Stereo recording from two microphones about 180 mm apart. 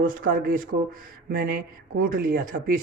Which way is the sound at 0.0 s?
50° right (ahead or behind).